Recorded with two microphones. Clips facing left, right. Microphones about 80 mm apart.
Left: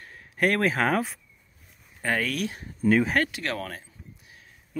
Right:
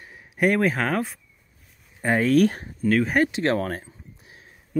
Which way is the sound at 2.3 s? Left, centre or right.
Right.